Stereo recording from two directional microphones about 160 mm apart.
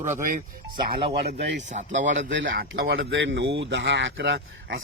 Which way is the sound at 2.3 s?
80° right.